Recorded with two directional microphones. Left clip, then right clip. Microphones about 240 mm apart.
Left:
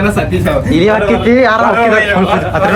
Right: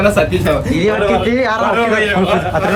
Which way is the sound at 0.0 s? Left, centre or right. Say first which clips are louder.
Right 1 dB; centre.